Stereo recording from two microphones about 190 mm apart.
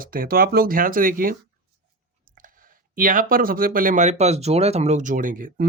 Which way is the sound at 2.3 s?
45° right (ahead or behind).